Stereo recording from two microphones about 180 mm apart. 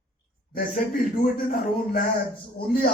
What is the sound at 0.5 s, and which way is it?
Speech, 50° left (ahead or behind).